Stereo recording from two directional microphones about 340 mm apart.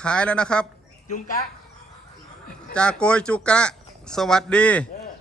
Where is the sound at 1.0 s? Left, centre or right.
Left.